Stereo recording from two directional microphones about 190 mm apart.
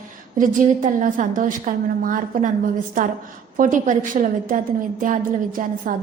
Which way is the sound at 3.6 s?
45° right (ahead or behind).